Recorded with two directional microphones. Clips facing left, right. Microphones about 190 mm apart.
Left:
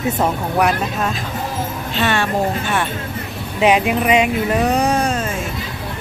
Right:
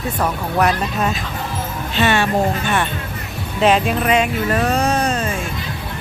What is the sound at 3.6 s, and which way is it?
Speech, 15° left (ahead or behind).